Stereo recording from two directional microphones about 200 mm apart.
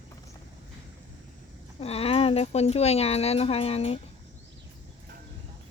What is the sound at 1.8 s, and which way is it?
Speech, 30° left (ahead or behind).